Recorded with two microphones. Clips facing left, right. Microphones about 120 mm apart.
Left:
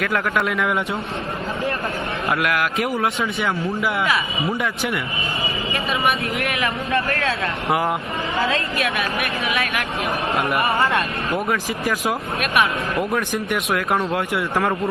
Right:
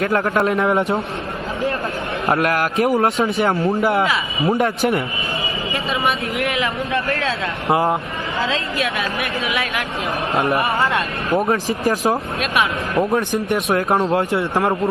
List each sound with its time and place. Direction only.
0.0 s speech: 30° right (ahead or behind)
2.2 s speech: 35° right (ahead or behind)
7.7 s speech: 30° right (ahead or behind)
10.5 s speech: 25° right (ahead or behind)